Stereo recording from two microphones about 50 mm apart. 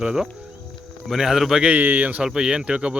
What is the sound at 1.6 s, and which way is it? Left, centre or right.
Speech, right.